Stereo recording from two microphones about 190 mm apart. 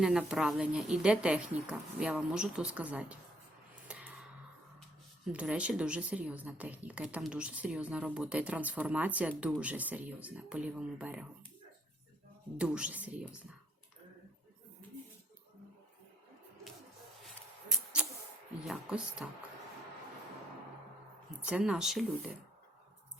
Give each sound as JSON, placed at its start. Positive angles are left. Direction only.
{"t": 0.0, "sound": "a woman's voice", "side_deg": -5}
{"t": 3.8, "sound": "music", "side_deg": -5}
{"t": 5.3, "sound": "a woman's voice", "side_deg": -5}
{"t": 12.5, "sound": "a woman's voice", "side_deg": -5}
{"t": 18.7, "sound": "a woman's voice", "side_deg": -5}
{"t": 21.2, "sound": "a woman's voice", "side_deg": -5}